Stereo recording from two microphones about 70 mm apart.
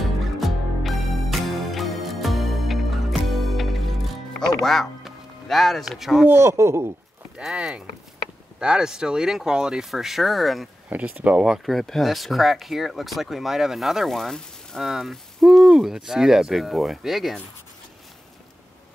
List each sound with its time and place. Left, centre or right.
0.0 s music: centre
4.6 s speech: centre
6.2 s speech: right
7.4 s speech: centre
10.9 s speech: right
11.3 s speech: centre